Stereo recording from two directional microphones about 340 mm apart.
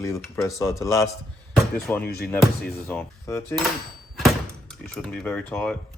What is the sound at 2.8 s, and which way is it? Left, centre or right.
Dishes, centre.